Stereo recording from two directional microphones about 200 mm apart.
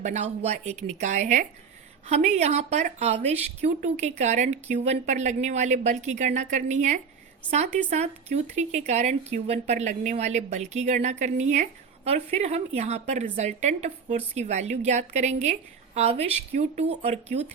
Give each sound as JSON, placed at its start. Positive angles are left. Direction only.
{"t": 0.0, "sound": "a woman's voice", "side_deg": -35}